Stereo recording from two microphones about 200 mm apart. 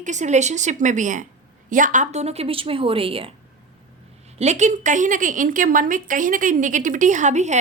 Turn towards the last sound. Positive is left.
turn(degrees=-35)  # may be behind; listen again after turning